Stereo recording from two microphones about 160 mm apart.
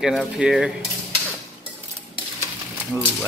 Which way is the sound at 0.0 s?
5° right (ahead or behind).